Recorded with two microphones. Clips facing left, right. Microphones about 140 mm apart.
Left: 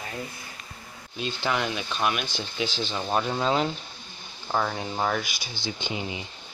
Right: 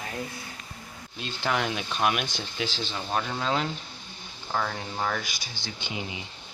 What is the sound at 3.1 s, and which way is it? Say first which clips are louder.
Speech: left 3 dB; 15° left (ahead or behind).